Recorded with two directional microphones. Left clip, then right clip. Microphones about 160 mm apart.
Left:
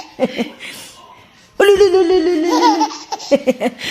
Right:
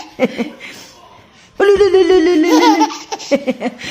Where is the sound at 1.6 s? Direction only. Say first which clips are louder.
Even; 60° left (ahead or behind).